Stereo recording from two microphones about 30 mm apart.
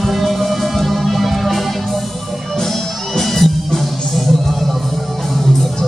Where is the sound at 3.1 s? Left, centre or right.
Centre.